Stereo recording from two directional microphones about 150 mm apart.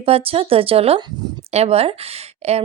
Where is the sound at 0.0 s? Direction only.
40° right (ahead or behind).